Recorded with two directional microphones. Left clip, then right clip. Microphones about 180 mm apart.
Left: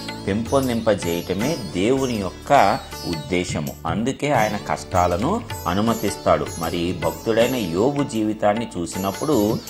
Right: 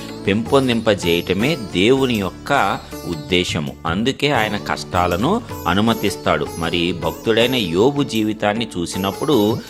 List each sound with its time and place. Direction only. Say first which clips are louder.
0.3 s speech: right 5 dB; 45° right (ahead or behind)
2.5 s speech: left 2 dB; 20° right (ahead or behind)
3.2 s speech: right 7 dB; 30° right (ahead or behind)
4.9 s speech: right 2 dB; 50° right (ahead or behind)